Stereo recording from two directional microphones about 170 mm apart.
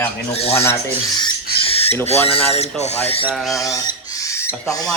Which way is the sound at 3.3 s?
Centre (ahead or behind).